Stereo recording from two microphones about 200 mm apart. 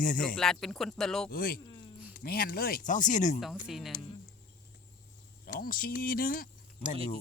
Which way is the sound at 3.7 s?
Centre (ahead or behind).